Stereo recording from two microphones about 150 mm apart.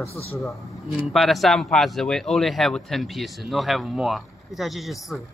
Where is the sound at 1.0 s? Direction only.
Centre (ahead or behind).